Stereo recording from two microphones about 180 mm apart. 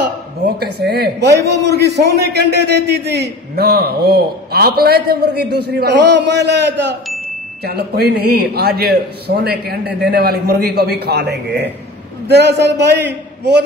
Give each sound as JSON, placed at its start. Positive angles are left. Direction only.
{"t": 0.0, "sound": "a man's voice", "side_deg": -65}